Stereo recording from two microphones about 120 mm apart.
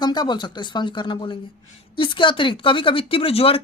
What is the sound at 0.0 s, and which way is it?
Speech, 35° left (ahead or behind).